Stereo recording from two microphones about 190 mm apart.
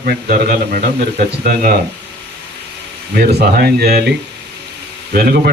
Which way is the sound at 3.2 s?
55° right (ahead or behind).